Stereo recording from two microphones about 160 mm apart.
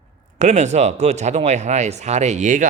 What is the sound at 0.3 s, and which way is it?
Speech, 45° right (ahead or behind).